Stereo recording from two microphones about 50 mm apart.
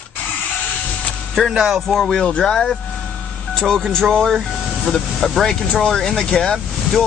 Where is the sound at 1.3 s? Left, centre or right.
Centre.